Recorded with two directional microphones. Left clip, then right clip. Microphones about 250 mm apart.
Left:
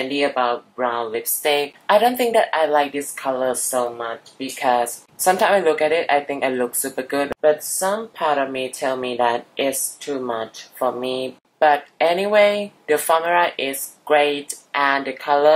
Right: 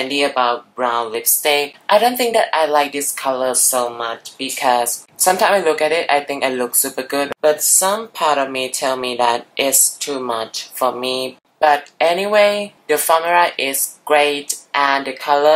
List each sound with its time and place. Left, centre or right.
0.0 s speech: centre
10.0 s speech: left
10.4 s speech: centre